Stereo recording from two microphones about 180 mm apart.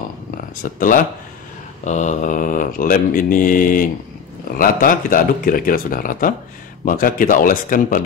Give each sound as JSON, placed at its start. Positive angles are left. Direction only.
{"t": 0.7, "sound": "mantra", "side_deg": 50}